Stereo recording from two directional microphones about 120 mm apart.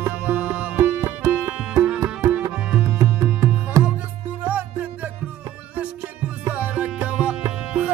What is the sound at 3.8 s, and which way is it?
Music, 25° right (ahead or behind).